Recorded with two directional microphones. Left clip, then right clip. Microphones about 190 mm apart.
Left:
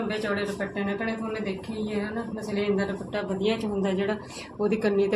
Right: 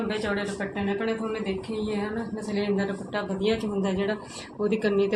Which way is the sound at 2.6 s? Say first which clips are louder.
Left 1 dB; 10° left (ahead or behind).